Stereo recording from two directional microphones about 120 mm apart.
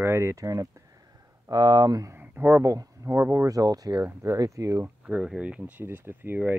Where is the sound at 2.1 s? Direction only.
20° right (ahead or behind).